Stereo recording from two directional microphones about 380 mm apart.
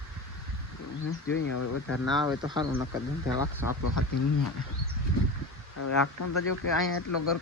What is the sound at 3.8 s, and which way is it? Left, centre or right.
Speech, left.